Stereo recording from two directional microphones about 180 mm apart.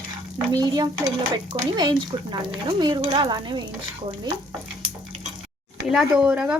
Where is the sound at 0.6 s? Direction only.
20° right (ahead or behind).